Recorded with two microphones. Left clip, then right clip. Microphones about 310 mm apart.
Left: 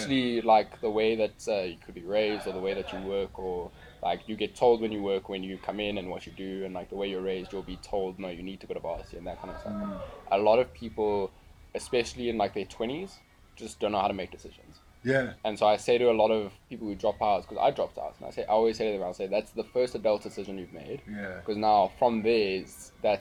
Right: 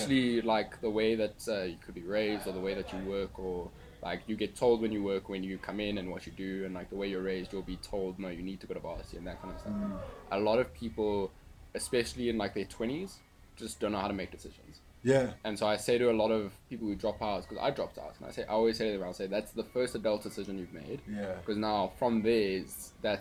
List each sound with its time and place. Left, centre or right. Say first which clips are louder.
0.0 s speech: left 2 dB; centre
15.0 s speech: even; centre
15.4 s speech: left 7 dB; centre